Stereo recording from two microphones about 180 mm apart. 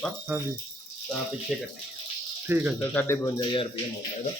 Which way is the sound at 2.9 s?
10° left (ahead or behind).